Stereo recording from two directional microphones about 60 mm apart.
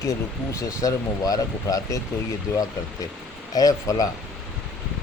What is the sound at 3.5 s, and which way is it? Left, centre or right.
Speech, left.